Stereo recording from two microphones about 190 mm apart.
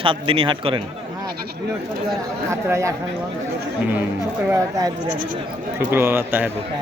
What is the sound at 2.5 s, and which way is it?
Speech, 15° right (ahead or behind).